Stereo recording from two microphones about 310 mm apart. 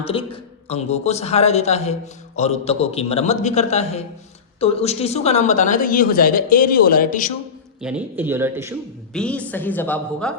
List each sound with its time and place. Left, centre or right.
0.1 s a man's voice: centre
7.8 s a man's voice: centre
9.1 s a woman's voice: centre